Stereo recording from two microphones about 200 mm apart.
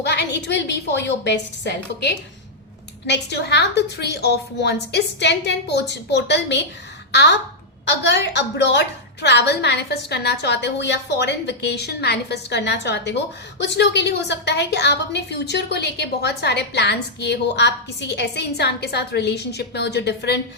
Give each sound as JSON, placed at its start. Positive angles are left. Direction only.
{"t": 0.0, "sound": "a woman's voice", "side_deg": 55}